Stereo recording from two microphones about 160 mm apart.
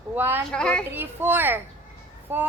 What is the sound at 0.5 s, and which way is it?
Speech, 5° left (ahead or behind).